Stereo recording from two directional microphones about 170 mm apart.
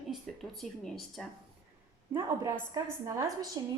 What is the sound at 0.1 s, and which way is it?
Speech, centre (ahead or behind).